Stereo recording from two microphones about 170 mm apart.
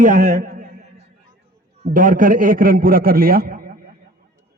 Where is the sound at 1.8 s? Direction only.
45° right (ahead or behind).